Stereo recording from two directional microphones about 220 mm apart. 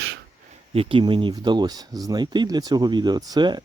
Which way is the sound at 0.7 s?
25° right (ahead or behind).